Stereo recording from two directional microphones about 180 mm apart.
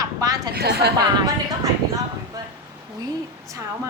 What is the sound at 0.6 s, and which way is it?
Speech, 60° right (ahead or behind).